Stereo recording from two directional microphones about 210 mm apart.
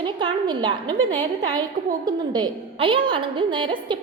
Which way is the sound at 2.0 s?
20° right (ahead or behind).